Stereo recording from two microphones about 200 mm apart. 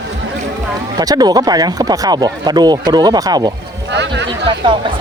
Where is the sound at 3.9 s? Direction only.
60° right (ahead or behind).